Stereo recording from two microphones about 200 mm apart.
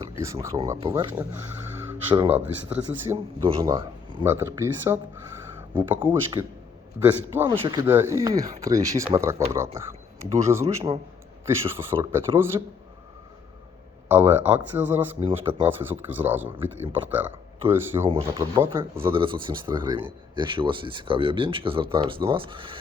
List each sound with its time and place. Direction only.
0.2 s speech: 15° right (ahead or behind)
1.9 s a sound: 10° right (ahead or behind)
2.3 s speech: 10° right (ahead or behind)
3.6 s speech: 20° right (ahead or behind)
7.6 s speech: 20° right (ahead or behind)
7.9 s speech: 10° right (ahead or behind)
10.8 s speech: 30° right (ahead or behind)
11.4 s speech: 10° right (ahead or behind)
14.1 s speech: 10° right (ahead or behind)
18.1 s speech: 25° right (ahead or behind)
18.6 s speech: 10° right (ahead or behind)
19.0 s speech: 25° right (ahead or behind)